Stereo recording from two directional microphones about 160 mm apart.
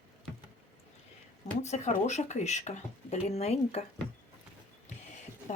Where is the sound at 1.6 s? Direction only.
45° left (ahead or behind).